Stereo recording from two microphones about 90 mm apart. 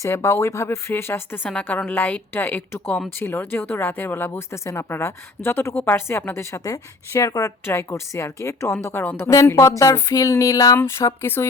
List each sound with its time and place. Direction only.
0.0 s a woman's voice: 30° left (ahead or behind)
9.3 s a woman's voice: 35° left (ahead or behind)